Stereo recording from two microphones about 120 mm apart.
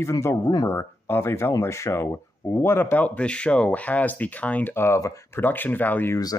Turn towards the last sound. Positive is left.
turn(degrees=15)  # may be behind; listen again after turning